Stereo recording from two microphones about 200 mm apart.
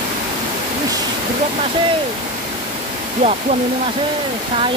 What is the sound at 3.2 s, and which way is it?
Speech, 30° right (ahead or behind).